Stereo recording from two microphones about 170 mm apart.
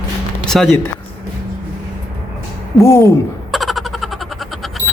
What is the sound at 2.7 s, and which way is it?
Speech, 15° left (ahead or behind).